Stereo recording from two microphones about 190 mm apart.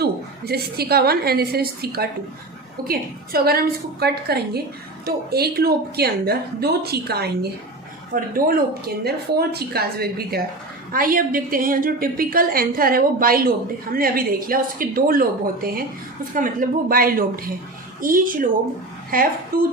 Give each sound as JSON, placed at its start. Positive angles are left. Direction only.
{"t": 0.0, "sound": "a woman's voice", "side_deg": -55}